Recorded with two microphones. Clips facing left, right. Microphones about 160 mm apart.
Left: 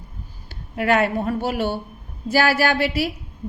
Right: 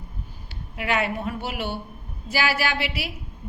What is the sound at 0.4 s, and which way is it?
A woman's voice, 45° left (ahead or behind).